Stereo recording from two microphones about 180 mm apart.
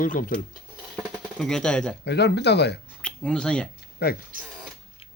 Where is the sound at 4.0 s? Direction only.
60° left (ahead or behind).